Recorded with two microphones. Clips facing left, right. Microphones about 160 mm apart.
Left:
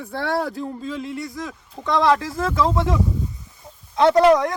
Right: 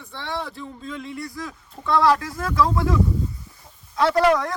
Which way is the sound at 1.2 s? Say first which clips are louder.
Left 2 dB; 20° left (ahead or behind).